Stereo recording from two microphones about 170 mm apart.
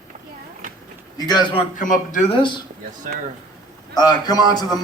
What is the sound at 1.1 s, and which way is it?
Speech, 25° left (ahead or behind).